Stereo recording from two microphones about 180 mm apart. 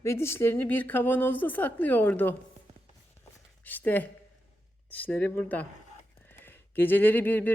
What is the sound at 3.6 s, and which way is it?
A woman's voice, 10° left (ahead or behind).